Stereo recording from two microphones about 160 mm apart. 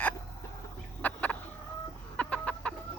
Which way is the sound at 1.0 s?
10° left (ahead or behind).